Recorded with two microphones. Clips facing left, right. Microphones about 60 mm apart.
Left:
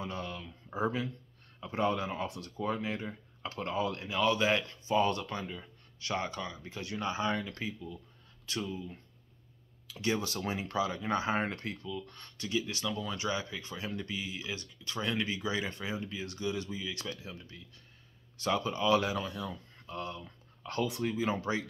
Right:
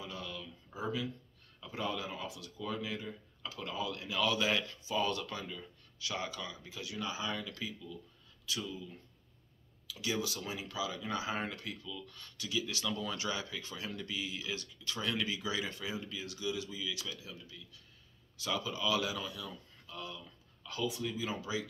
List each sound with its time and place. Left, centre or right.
0.0 s a sound: left
1.7 s speech: left
5.9 s speech: left
12.8 s speech: centre
13.2 s speech: left
21.1 s speech: left